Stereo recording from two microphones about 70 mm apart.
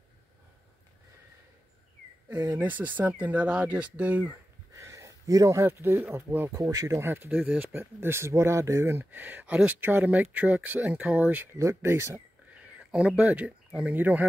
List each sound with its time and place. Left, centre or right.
2.6 s speech: right
4.7 s a sound: right
5.7 s speech: right
6.5 s speech: right
6.9 s speech: right
7.8 s speech: right
11.5 s speech: right
12.5 s speech: centre